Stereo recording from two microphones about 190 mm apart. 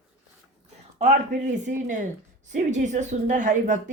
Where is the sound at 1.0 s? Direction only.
40° right (ahead or behind).